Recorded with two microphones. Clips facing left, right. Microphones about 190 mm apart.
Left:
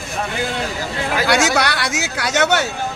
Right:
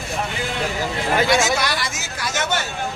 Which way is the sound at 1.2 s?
70° left (ahead or behind).